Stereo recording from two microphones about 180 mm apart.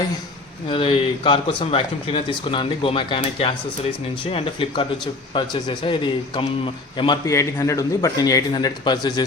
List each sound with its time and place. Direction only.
0.7 s speech: 30° left (ahead or behind)